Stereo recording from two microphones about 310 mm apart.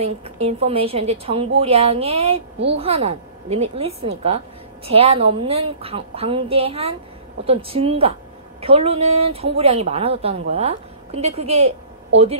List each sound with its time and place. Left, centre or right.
0.0 s a woman's voice: centre